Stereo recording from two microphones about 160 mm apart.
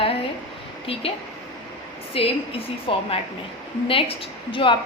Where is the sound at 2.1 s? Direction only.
35° left (ahead or behind).